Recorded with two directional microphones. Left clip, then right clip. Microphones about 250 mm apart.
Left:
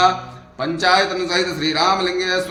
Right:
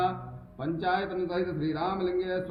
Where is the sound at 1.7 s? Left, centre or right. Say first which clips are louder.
Left 14 dB; left.